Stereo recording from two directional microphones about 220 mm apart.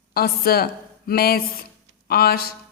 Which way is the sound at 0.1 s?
45° left (ahead or behind).